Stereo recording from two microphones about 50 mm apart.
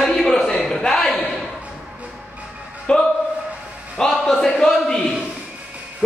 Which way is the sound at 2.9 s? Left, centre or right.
Centre.